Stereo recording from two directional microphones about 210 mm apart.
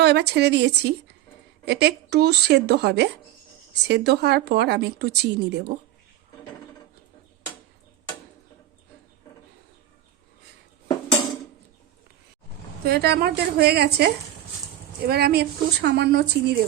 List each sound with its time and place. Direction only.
0.0 s a woman's voice: 50° right (ahead or behind)
12.8 s a woman's voice: 50° right (ahead or behind)